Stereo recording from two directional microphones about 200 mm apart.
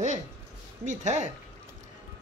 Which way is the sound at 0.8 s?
35° right (ahead or behind).